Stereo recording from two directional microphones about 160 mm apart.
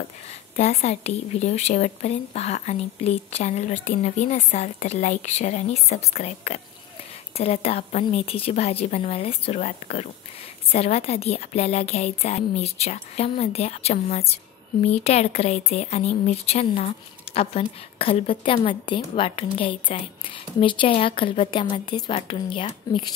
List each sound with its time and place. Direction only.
0.6 s speech: 45° left (ahead or behind)